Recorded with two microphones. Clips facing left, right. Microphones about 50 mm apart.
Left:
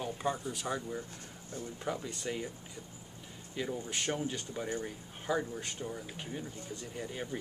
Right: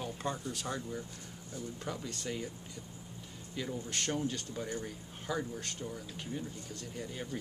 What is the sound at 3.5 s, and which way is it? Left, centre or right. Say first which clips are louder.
Speech: left 2 dB; centre.